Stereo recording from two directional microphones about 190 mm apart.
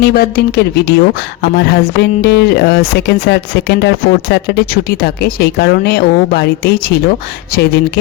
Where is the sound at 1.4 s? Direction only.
60° left (ahead or behind).